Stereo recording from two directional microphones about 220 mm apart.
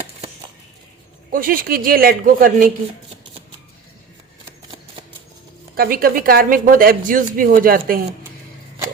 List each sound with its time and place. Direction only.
1.3 s speech: 40° right (ahead or behind)
5.7 s speech: 40° right (ahead or behind)